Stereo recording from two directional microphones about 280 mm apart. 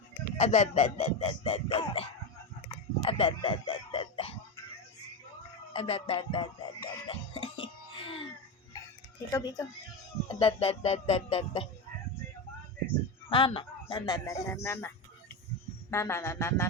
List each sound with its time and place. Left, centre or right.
0.3 s speech: left
2.6 s a sound: centre
5.7 s music: left
9.3 s speech: centre
13.3 s speech: centre